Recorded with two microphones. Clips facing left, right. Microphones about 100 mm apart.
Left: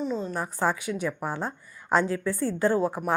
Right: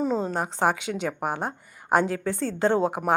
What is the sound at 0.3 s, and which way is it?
A woman's voice, 80° right.